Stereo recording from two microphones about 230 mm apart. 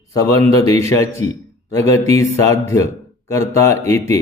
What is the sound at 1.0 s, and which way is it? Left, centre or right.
Speech, centre.